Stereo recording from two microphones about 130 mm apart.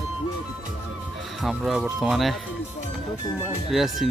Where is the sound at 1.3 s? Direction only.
Centre (ahead or behind).